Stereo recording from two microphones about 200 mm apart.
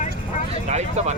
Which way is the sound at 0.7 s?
35° right (ahead or behind).